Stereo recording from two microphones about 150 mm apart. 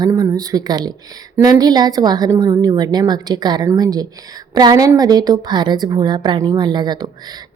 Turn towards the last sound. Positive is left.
turn(degrees=-30)  # may be behind; listen again after turning